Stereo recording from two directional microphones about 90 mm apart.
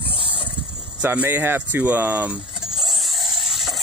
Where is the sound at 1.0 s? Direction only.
20° right (ahead or behind).